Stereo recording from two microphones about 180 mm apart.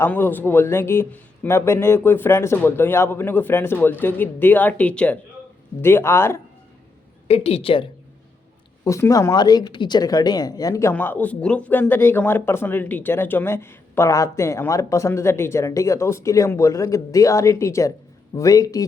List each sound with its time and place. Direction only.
0.0 s speech: 10° left (ahead or behind)
7.3 s a woman's voice: 35° left (ahead or behind)
8.8 s speech: 15° left (ahead or behind)